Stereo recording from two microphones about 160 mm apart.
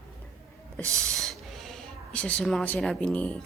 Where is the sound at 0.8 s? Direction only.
20° right (ahead or behind).